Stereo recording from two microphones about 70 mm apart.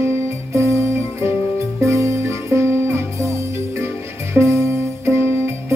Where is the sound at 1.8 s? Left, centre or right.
Right.